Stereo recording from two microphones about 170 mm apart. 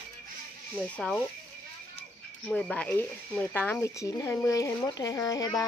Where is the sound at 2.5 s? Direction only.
5° left (ahead or behind).